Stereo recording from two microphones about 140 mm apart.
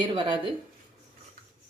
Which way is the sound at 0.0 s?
35° right (ahead or behind).